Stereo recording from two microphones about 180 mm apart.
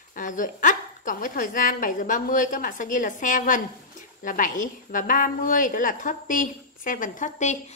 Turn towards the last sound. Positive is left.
turn(degrees=40)  # may be behind; listen again after turning